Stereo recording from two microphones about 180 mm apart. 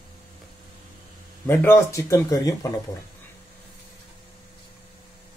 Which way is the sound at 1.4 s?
15° left (ahead or behind).